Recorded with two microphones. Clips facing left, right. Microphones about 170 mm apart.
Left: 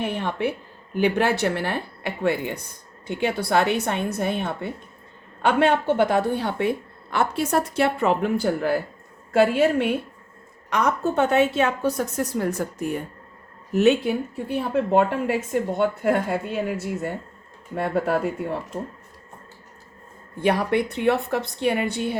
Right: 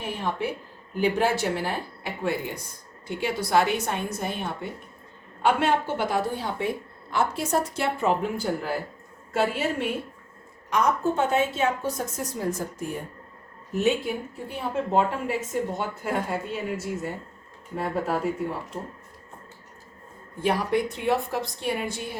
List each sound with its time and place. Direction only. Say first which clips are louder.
0.0 s a woman's voice: left 4 dB; 65° left (ahead or behind)
20.4 s a woman's voice: left 3 dB; 65° left (ahead or behind)